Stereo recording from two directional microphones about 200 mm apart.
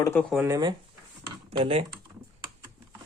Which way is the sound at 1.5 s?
30° right (ahead or behind).